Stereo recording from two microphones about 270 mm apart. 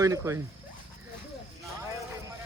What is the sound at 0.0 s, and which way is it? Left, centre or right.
Speech, centre.